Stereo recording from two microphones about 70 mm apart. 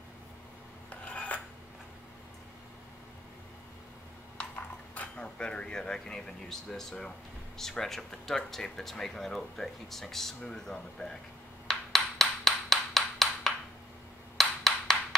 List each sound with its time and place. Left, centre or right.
0.8 s dishes: centre
4.9 s speech: centre
11.6 s ping: centre
14.3 s a sound: centre